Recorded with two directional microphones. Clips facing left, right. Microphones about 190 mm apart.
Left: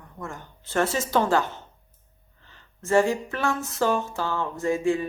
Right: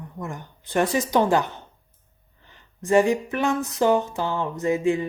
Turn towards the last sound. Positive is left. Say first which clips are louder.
# right 2 dB
turn(degrees=-20)  # may be behind; listen again after turning